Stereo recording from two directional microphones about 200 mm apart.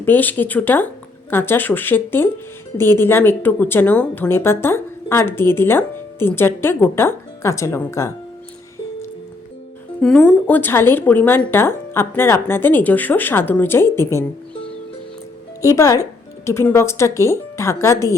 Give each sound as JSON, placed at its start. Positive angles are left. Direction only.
{"t": 0.0, "sound": "a woman's voice", "side_deg": 10}
{"t": 10.0, "sound": "a woman's voice", "side_deg": 5}
{"t": 15.6, "sound": "a woman's voice", "side_deg": 15}